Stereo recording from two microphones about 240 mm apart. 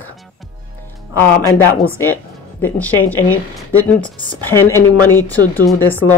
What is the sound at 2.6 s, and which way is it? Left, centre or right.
Speech, centre.